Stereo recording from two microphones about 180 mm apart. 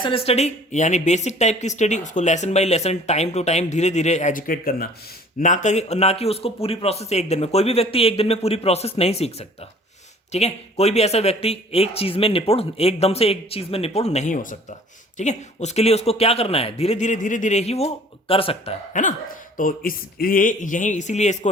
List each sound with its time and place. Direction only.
0.0 s speech: 30° left (ahead or behind)
18.9 s speech: 45° left (ahead or behind)